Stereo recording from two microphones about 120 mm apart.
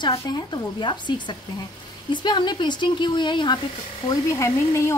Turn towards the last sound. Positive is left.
turn(degrees=25)  # may be behind; listen again after turning